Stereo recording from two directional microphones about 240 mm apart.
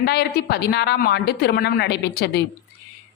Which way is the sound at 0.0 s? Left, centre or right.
Left.